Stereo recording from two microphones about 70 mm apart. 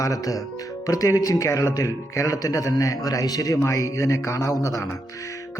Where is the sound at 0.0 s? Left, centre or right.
Left.